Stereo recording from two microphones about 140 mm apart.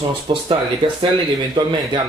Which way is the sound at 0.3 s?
40° right (ahead or behind).